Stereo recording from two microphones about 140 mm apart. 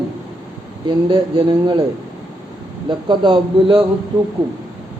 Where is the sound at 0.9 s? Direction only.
35° right (ahead or behind).